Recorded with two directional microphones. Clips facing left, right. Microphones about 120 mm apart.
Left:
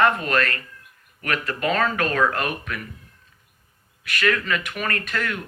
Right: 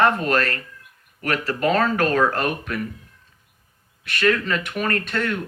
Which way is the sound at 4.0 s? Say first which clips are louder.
Right 3 dB; 30° right (ahead or behind).